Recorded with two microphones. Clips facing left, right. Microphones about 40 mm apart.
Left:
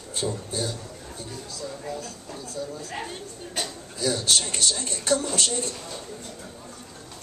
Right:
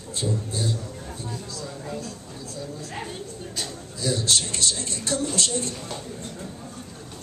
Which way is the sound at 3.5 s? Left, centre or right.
Left.